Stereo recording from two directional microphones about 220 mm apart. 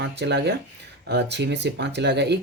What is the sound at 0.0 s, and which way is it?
Speech, 50° right (ahead or behind).